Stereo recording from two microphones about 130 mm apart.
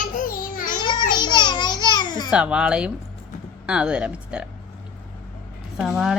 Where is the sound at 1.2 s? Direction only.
35° left (ahead or behind).